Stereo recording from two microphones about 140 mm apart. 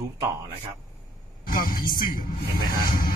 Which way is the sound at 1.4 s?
90° left.